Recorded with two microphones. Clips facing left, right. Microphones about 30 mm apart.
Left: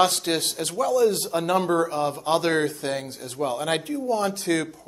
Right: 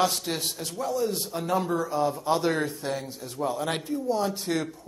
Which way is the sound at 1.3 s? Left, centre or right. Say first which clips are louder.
Left 5 dB; left.